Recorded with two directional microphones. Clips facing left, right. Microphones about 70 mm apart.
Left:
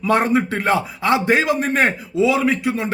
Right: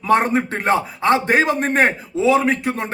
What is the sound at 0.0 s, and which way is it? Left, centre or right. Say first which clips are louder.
A man's voice: right 1 dB; right.